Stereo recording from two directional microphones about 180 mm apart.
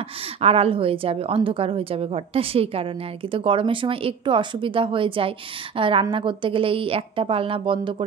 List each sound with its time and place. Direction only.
0.4 s a woman's voice: 35° right (ahead or behind)